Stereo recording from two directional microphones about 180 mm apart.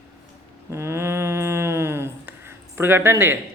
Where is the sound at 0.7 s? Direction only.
15° right (ahead or behind).